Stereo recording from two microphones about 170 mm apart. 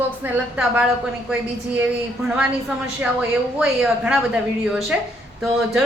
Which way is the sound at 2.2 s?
Centre (ahead or behind).